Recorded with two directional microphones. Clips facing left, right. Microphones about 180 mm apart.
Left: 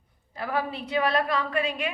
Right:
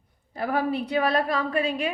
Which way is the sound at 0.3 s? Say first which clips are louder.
Right 4 dB; 45° right (ahead or behind).